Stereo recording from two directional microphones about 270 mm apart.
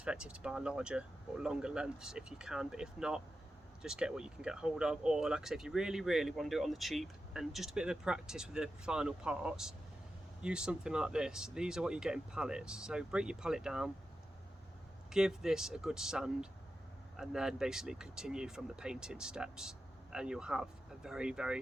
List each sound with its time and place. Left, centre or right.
0.0 s speech: centre
15.1 s speech: centre